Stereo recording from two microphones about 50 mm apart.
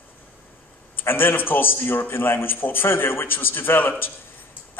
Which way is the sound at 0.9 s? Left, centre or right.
Left.